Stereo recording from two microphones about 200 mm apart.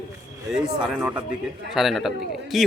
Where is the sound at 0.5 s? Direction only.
5° right (ahead or behind).